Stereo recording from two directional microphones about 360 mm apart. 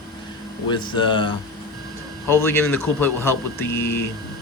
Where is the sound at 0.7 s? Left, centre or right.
Centre.